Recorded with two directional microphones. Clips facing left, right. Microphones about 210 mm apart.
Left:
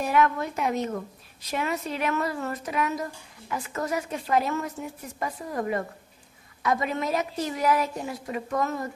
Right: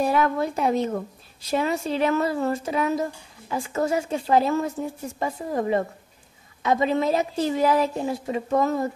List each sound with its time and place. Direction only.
0.0 s a woman's voice: 30° right (ahead or behind)